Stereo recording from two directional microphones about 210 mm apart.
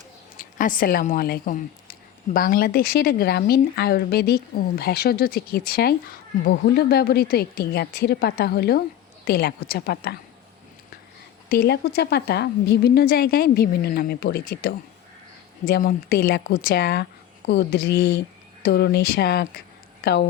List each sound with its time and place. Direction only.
0.3 s speech: 40° left (ahead or behind)
11.4 s speech: 50° left (ahead or behind)